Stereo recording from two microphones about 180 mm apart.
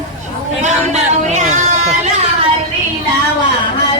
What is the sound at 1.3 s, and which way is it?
Speech, 40° right (ahead or behind).